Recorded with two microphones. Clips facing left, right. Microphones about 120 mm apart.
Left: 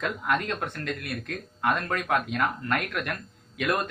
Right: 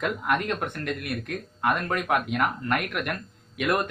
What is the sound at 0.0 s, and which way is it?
Speech, 15° right (ahead or behind).